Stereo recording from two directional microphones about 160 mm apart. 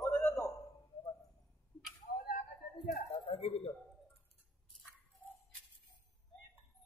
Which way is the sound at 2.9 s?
40° left (ahead or behind).